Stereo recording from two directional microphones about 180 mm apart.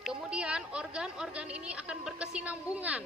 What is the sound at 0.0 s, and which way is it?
A woman's voice, 5° right (ahead or behind).